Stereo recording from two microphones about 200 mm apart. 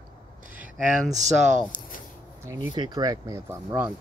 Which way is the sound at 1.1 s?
35° right (ahead or behind).